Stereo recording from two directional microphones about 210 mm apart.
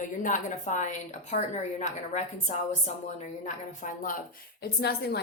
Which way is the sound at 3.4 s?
40° left (ahead or behind).